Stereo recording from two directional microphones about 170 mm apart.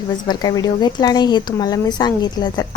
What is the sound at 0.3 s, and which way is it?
A woman's voice, 25° left (ahead or behind).